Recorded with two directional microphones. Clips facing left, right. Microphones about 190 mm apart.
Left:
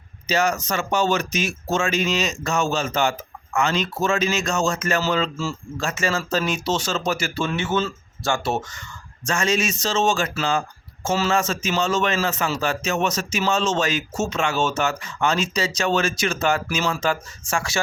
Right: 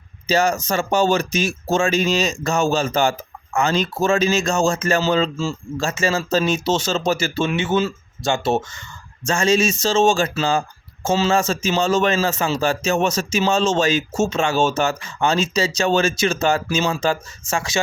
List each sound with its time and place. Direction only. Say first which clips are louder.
0.3 s speech: right 3 dB; 30° right (ahead or behind)